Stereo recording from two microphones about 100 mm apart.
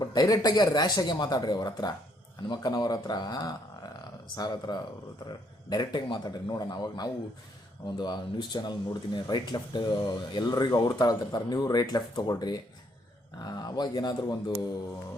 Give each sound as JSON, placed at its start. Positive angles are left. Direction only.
{"t": 0.0, "sound": "speech", "side_deg": 40}